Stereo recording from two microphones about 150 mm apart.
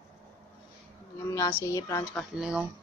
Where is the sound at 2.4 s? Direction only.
5° right (ahead or behind).